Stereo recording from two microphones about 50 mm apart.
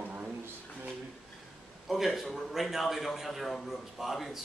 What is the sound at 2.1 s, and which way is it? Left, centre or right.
A man's voice, centre.